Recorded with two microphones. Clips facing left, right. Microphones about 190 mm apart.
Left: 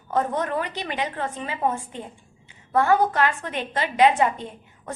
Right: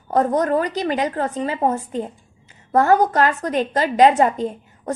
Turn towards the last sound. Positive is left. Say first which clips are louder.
# right 11 dB
turn(degrees=-40)  # may be behind; listen again after turning